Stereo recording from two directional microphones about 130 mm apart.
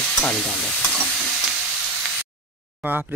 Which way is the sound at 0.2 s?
5° left (ahead or behind).